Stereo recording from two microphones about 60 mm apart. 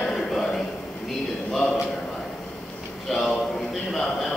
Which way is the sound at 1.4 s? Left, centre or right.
Centre.